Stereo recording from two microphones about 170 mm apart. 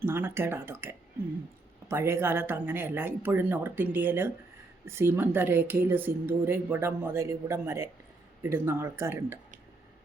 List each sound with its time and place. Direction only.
0.0 s speech: 15° right (ahead or behind)